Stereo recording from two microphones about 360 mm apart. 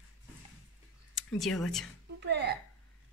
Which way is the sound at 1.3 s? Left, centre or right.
Centre.